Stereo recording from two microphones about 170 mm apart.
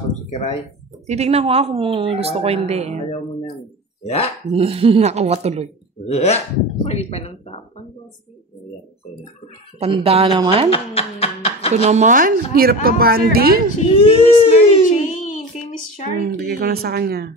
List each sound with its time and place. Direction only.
0.3 s speech: 40° left (ahead or behind)
1.0 s speech: 40° right (ahead or behind)
3.1 s a sound: 35° left (ahead or behind)
4.0 s speech: 40° left (ahead or behind)
4.5 s speech: 35° right (ahead or behind)
6.0 s speech: 40° left (ahead or behind)
9.8 s speech: 35° right (ahead or behind)
10.7 s a sound: 35° left (ahead or behind)
11.7 s speech: 45° right (ahead or behind); by 13.7 s 65° right (ahead or behind)
13.8 s a sound: 35° left (ahead or behind); by 15.4 s 50° left (ahead or behind)
16.2 s speech: 65° right (ahead or behind)